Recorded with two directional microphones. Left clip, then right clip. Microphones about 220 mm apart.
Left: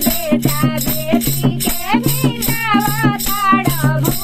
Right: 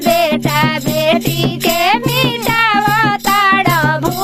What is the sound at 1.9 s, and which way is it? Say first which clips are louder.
Music: right 5 dB; 50° right (ahead or behind).